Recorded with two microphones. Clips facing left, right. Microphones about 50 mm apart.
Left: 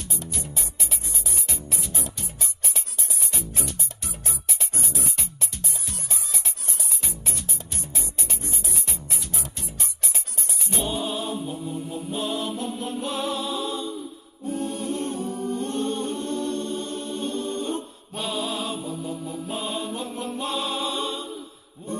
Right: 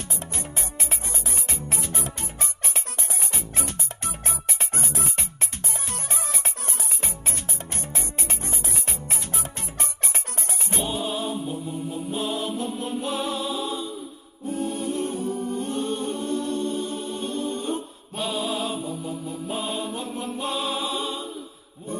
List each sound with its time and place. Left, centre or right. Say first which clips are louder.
0.3 s music: right 2 dB; right
10.8 s music: even; centre
14.8 s a capella: right 1 dB; centre
15.7 s music: even; centre
18.2 s a sound: right 1 dB; centre
19.5 s music: right 1 dB; centre